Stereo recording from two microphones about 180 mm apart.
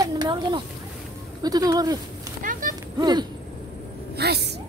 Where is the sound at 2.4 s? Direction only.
45° right (ahead or behind).